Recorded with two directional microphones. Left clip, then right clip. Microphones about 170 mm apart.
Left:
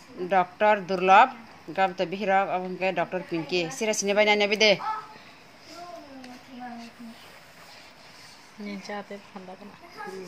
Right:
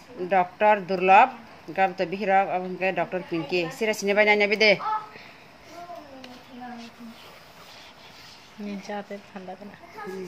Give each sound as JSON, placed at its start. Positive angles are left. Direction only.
{"t": 0.3, "sound": "speech", "side_deg": 20}
{"t": 8.6, "sound": "speech", "side_deg": -15}